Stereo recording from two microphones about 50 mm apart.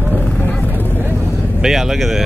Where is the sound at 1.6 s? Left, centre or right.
Centre.